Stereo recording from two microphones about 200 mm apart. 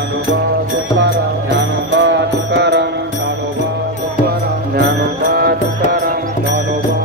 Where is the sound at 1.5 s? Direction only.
65° right (ahead or behind).